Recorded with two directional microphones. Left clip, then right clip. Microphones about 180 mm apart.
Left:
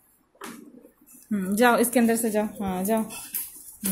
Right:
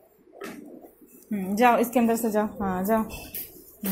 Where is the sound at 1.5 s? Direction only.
20° left (ahead or behind).